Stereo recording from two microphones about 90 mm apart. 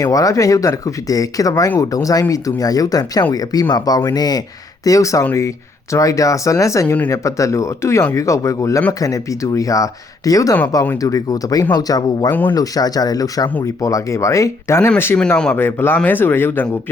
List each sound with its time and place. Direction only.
0.0 s speech: 40° left (ahead or behind)
6.8 s speech: 20° left (ahead or behind)
7.1 s speech: 35° left (ahead or behind)
12.3 s speech: 20° left (ahead or behind)
12.5 s speech: 45° left (ahead or behind); by 16.6 s 25° left (ahead or behind)